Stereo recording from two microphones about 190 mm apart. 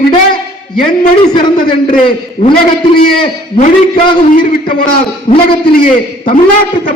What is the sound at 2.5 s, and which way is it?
Speech, 50° left (ahead or behind).